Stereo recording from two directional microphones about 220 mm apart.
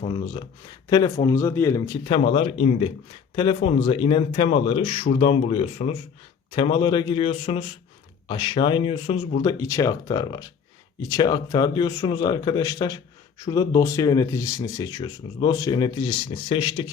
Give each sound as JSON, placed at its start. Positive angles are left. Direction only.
{"t": 0.0, "sound": "speech", "side_deg": 20}
{"t": 2.0, "sound": "speech", "side_deg": 25}